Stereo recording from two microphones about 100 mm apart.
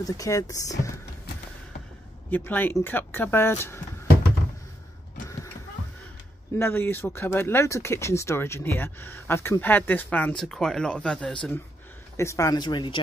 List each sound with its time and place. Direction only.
0.0 s speech: 35° left (ahead or behind)
2.3 s speech: 20° left (ahead or behind)
6.6 s speech: 20° left (ahead or behind)
12.2 s speech: 30° left (ahead or behind)
12.5 s speech: 50° left (ahead or behind)